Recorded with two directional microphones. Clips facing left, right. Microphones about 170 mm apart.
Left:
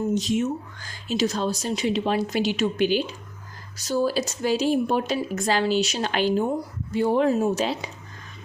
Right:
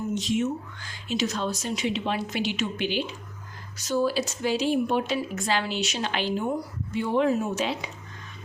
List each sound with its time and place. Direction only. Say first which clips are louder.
0.1 s speech: left 3 dB; 40° left (ahead or behind)